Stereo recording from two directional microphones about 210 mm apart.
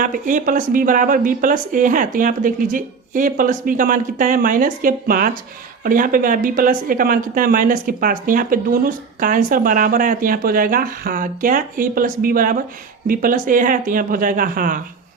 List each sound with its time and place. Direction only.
0.0 s speech: 40° right (ahead or behind)